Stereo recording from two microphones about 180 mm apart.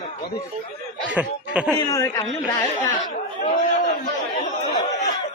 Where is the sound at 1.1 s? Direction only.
5° right (ahead or behind).